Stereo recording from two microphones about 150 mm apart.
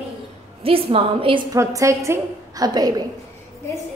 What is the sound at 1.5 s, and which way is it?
A woman's voice, 20° right (ahead or behind).